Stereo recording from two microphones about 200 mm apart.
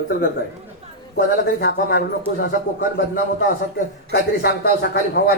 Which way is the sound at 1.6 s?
60° left (ahead or behind).